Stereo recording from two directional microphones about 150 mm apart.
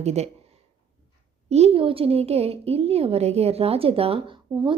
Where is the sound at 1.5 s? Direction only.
40° right (ahead or behind).